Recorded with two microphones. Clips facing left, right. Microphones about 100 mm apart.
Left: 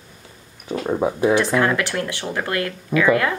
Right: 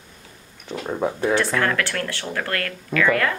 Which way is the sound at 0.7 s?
10° left (ahead or behind).